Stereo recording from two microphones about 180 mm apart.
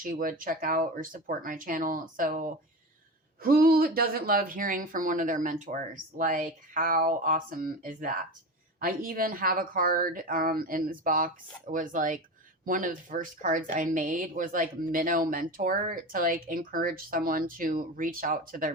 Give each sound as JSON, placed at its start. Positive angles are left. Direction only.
{"t": 0.0, "sound": "a woman's voice", "side_deg": -50}